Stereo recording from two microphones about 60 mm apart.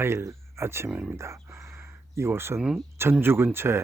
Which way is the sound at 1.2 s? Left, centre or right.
Right.